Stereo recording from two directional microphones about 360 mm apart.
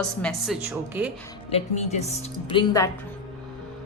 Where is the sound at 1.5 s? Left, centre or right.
Centre.